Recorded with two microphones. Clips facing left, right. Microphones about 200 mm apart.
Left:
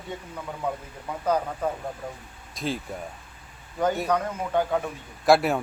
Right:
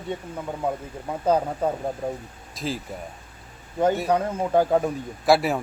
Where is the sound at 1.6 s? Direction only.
30° right (ahead or behind).